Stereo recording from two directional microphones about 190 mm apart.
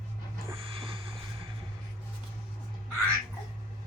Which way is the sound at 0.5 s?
30° right (ahead or behind).